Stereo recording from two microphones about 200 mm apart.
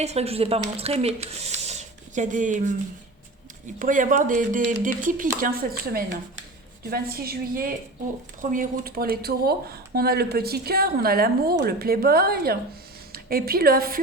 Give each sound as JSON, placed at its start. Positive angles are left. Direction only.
{"t": 0.0, "sound": "speech", "side_deg": -30}
{"t": 3.8, "sound": "a woman's voice", "side_deg": -40}